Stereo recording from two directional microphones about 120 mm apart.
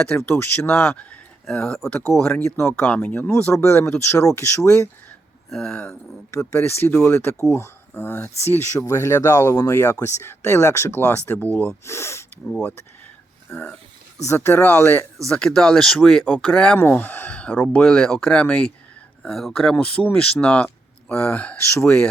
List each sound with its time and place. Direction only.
0.2 s speech: 20° left (ahead or behind)
2.6 s speech: 20° left (ahead or behind)
5.5 s speech: 5° left (ahead or behind)
6.5 s speech: 20° left (ahead or behind)
12.5 s speech: 5° left (ahead or behind)
15.3 s speech: 5° left (ahead or behind)